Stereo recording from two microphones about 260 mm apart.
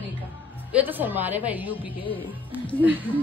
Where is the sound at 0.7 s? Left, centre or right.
Centre.